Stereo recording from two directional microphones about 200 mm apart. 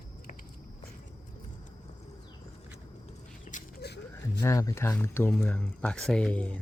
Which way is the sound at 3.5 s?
35° left (ahead or behind).